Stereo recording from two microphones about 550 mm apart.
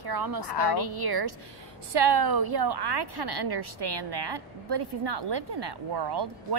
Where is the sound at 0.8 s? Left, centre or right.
Right.